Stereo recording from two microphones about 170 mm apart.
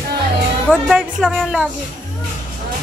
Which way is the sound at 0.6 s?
Centre (ahead or behind).